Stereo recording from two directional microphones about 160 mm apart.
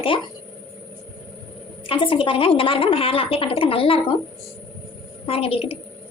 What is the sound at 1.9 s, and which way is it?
A woman's voice, 35° left (ahead or behind).